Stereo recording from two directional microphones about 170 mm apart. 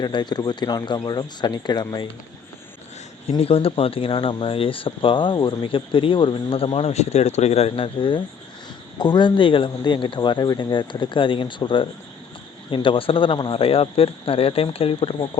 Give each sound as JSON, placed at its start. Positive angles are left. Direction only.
{"t": 0.0, "sound": "speech", "side_deg": 25}
{"t": 3.2, "sound": "speech", "side_deg": 35}